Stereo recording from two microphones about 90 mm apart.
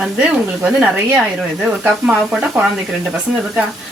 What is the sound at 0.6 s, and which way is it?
Speech, 15° right (ahead or behind).